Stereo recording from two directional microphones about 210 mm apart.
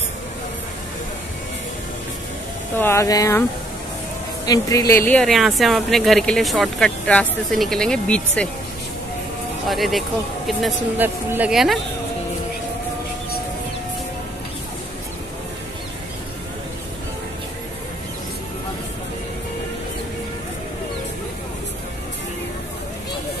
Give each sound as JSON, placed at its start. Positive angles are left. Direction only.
{"t": 2.8, "sound": "speech", "side_deg": 15}
{"t": 4.5, "sound": "speech", "side_deg": 15}
{"t": 9.7, "sound": "speech", "side_deg": 0}